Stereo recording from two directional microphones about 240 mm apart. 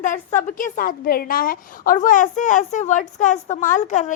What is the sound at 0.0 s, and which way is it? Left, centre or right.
A woman's voice, left.